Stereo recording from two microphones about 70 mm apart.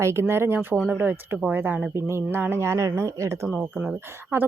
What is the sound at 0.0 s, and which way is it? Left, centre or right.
Speech, right.